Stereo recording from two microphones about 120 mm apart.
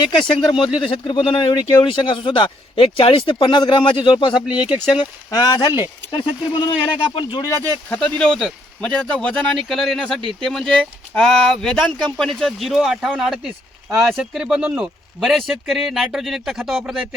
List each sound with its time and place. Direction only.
0.3 s speech: 45° left (ahead or behind)
6.1 s speech: 45° left (ahead or behind)
7.9 s speech: 5° left (ahead or behind)